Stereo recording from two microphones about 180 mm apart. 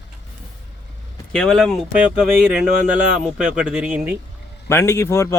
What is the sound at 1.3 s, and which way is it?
Speech, 5° left (ahead or behind).